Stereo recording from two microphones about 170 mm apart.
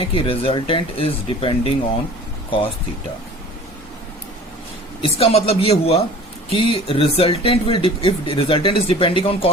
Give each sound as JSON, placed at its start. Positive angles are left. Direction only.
{"t": 0.0, "sound": "speech", "side_deg": 30}
{"t": 5.0, "sound": "speech", "side_deg": 35}